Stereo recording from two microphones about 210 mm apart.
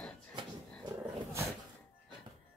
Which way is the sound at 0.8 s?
15° right (ahead or behind).